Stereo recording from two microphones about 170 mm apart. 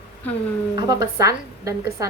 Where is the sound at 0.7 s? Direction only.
20° right (ahead or behind).